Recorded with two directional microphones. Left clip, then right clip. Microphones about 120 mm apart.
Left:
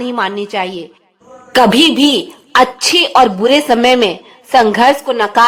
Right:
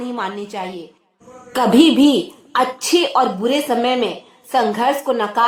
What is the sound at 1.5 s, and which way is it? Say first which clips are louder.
A woman's voice: left 4 dB; 45° left (ahead or behind).